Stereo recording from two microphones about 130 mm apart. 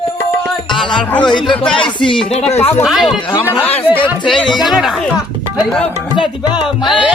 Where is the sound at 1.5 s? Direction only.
5° left (ahead or behind).